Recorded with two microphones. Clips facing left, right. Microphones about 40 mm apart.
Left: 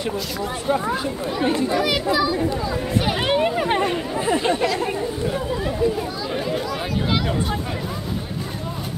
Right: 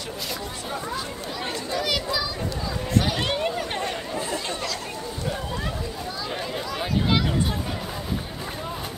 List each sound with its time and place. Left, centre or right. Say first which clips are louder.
0.7 s speech: left 11 dB; left
1.7 s a child's voice: left 6 dB; centre
3.0 s chatter: left 5 dB; centre
4.2 s speech: left 12 dB; left
6.3 s speech: left 6 dB; centre